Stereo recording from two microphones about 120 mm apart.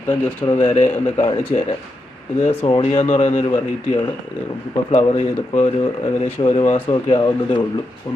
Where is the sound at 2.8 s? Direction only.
50° left (ahead or behind).